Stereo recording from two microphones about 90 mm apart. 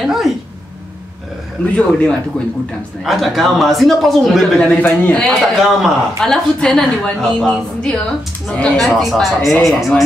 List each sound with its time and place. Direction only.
0.0 s speech: 5° right (ahead or behind)
1.8 s speech: 10° left (ahead or behind)
3.0 s speech: centre (ahead or behind)
4.7 s speech: 15° left (ahead or behind)
5.2 s speech: centre (ahead or behind)